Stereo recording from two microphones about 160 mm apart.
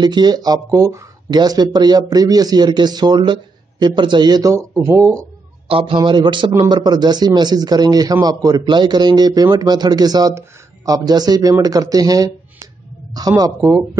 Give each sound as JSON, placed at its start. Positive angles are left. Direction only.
{"t": 0.0, "sound": "a man's voice", "side_deg": -25}
{"t": 5.7, "sound": "a man's voice", "side_deg": -35}
{"t": 13.4, "sound": "a man's voice", "side_deg": -20}